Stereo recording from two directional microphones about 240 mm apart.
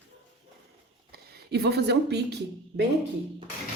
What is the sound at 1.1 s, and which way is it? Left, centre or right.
Speech, right.